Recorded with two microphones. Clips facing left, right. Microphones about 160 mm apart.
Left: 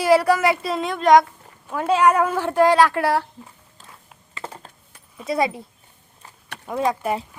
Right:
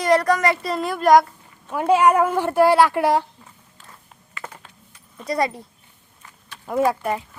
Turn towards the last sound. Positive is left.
turn(degrees=-5)  # may be behind; listen again after turning